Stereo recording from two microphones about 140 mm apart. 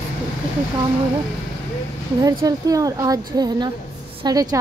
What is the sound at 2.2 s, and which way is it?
Speech, 25° right (ahead or behind).